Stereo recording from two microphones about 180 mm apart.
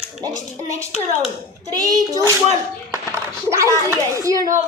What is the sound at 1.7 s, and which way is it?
Speech, 20° right (ahead or behind).